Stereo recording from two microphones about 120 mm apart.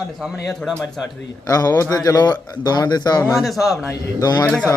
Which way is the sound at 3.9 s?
30° left (ahead or behind).